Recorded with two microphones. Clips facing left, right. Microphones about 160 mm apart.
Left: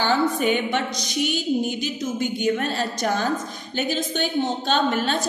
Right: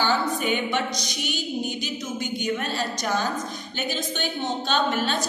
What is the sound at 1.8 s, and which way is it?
A woman's voice, 50° left (ahead or behind).